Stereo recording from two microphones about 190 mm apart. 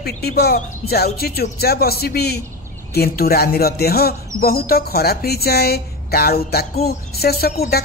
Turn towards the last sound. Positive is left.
turn(degrees=55)  # may be behind; listen again after turning